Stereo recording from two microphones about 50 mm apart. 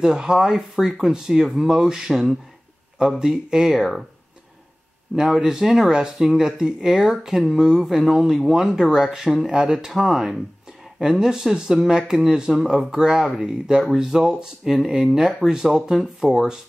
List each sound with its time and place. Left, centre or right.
0.0 s speech: centre
5.1 s speech: centre